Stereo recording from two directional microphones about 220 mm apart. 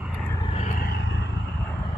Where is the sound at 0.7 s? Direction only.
45° left (ahead or behind).